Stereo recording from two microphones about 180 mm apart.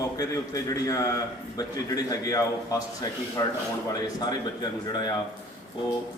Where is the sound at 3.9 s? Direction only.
20° left (ahead or behind).